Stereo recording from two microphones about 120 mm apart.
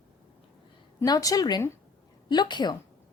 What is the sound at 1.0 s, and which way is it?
A woman's voice, 30° left (ahead or behind).